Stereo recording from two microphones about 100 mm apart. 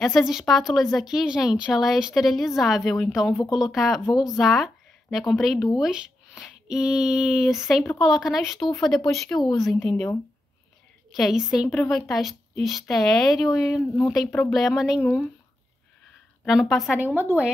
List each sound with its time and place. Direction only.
0.0 s a woman's voice: centre (ahead or behind)
16.4 s a woman's voice: centre (ahead or behind)
16.9 s speech: 20° right (ahead or behind)